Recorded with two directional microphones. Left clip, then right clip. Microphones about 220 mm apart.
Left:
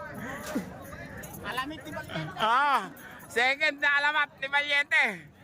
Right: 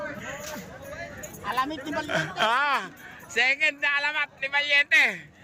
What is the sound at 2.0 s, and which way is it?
A man's voice, 5° left (ahead or behind).